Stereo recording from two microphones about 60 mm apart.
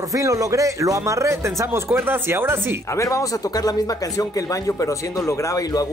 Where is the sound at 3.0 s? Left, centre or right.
Left.